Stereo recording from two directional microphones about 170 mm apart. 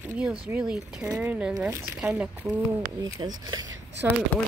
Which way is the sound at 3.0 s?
20° right (ahead or behind).